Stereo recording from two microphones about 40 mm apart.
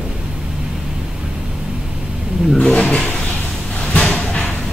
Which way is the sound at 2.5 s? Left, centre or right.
Left.